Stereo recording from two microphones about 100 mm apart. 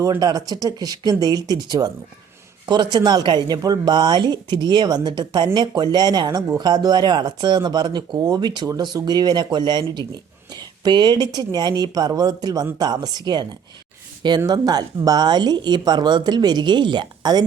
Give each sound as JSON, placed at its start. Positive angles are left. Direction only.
{"t": 0.0, "sound": "speech", "side_deg": -35}